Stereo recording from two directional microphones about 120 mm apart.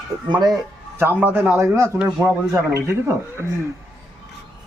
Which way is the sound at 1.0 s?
15° right (ahead or behind).